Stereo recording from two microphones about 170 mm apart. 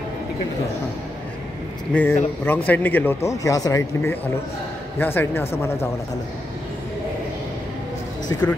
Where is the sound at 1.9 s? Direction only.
5° left (ahead or behind).